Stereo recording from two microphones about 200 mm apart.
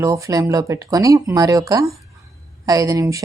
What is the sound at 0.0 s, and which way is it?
Speech, 15° right (ahead or behind).